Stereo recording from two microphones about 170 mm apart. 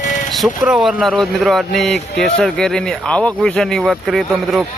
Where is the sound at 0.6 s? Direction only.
5° right (ahead or behind).